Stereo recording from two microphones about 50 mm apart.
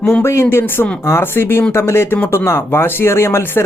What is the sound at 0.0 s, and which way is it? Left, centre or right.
Speech, left.